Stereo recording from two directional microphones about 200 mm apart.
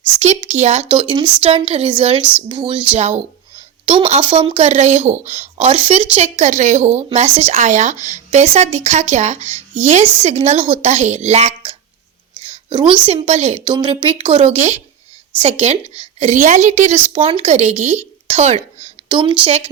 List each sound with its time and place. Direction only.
0.2 s a woman's voice: 35° right (ahead or behind)
12.7 s speech: 25° right (ahead or behind)
16.2 s speech: 35° right (ahead or behind)
17.1 s a woman's voice: 25° right (ahead or behind)
19.0 s speech: 25° right (ahead or behind)